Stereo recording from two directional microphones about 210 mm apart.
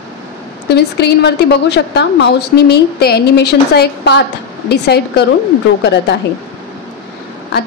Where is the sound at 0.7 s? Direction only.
55° left (ahead or behind).